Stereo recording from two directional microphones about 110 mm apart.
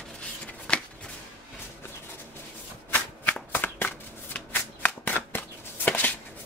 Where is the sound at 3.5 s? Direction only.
15° left (ahead or behind).